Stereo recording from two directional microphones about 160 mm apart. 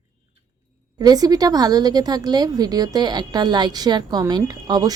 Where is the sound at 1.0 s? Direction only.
25° right (ahead or behind).